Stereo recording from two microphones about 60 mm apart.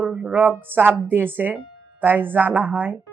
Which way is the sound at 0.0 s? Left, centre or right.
Centre.